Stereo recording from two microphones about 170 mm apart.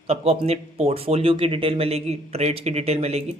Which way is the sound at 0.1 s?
35° right (ahead or behind).